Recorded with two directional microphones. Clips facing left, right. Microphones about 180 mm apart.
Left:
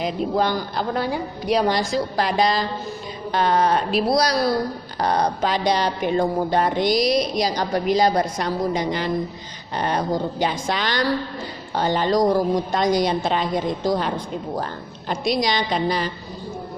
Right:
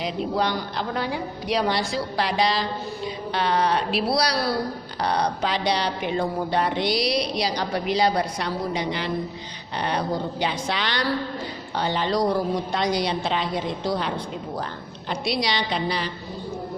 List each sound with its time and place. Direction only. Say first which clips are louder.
0.0 s speech: left 3 dB; 45° left (ahead or behind)
15.1 s speech: left 4 dB; 45° left (ahead or behind)